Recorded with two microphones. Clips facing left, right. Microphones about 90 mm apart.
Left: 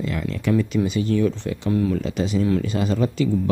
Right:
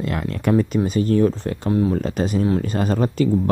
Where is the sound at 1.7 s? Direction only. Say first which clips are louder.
Right 2 dB; 30° right (ahead or behind).